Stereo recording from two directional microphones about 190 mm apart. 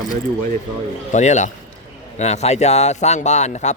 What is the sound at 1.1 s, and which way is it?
A man's voice, 40° left (ahead or behind).